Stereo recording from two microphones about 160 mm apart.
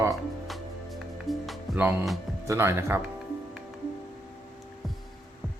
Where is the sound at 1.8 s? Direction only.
10° right (ahead or behind).